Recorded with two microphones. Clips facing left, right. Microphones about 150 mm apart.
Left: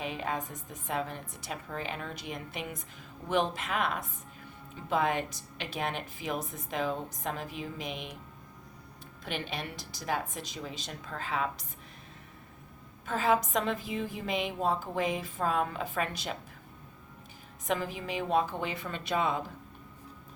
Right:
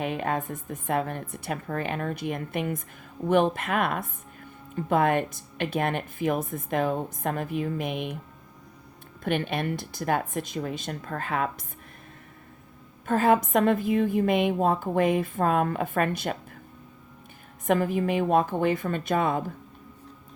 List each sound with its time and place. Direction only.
0.0 s a woman's voice: 55° right (ahead or behind)
9.2 s a woman's voice: 55° right (ahead or behind)
13.1 s a woman's voice: 55° right (ahead or behind)
17.7 s a woman's voice: 55° right (ahead or behind)